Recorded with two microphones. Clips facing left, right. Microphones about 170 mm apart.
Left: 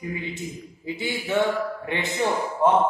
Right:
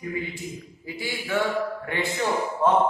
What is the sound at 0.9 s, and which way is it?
Speech, 20° left (ahead or behind).